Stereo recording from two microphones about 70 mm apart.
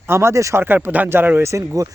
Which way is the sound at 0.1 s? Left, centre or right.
Right.